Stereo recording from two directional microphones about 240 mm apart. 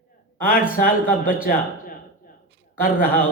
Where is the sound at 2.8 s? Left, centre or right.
Left.